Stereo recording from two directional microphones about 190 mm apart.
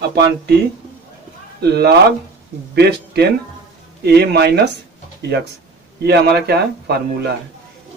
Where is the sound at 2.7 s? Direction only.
60° right (ahead or behind).